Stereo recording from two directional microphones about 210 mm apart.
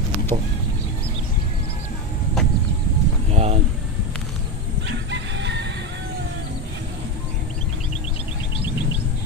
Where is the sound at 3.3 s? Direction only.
30° right (ahead or behind).